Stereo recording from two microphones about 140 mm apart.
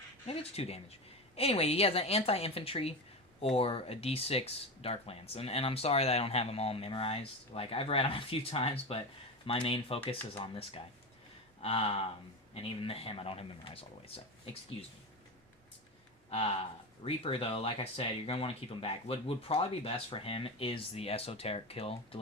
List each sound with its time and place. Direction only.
0.3 s speech: 45° left (ahead or behind)
16.3 s speech: 45° left (ahead or behind)